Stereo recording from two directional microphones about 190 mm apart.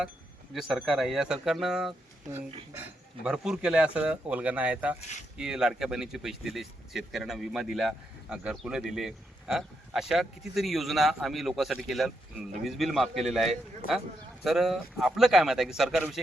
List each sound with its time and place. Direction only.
0.5 s speech: centre (ahead or behind)
3.2 s speech: 5° right (ahead or behind)
4.9 s speech: 35° left (ahead or behind)
5.4 s speech: 5° right (ahead or behind)
13.8 s speech: 50° left (ahead or behind)
14.4 s speech: centre (ahead or behind)